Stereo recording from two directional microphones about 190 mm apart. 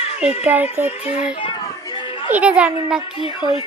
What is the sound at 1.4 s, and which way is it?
Children playing, 25° left (ahead or behind).